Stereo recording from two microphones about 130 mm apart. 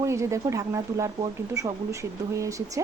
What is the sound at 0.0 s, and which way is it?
Speech, 20° right (ahead or behind).